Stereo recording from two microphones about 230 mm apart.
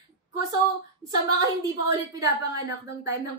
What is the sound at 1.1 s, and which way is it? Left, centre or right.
A woman's voice, centre.